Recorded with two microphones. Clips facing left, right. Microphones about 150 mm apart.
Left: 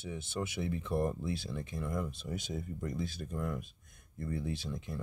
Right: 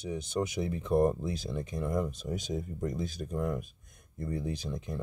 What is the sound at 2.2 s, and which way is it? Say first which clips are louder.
Speech: right 4 dB; 20° right (ahead or behind).